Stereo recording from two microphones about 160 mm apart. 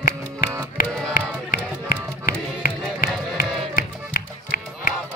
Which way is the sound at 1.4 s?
60° left (ahead or behind).